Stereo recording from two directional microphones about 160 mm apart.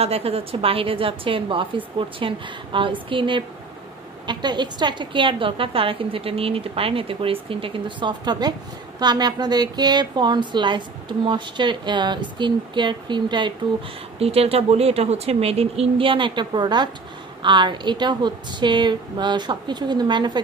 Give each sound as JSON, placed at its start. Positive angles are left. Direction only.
{"t": 0.0, "sound": "a woman's voice", "side_deg": -40}